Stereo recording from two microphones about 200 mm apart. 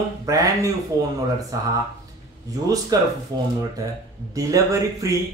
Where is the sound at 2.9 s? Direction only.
20° right (ahead or behind).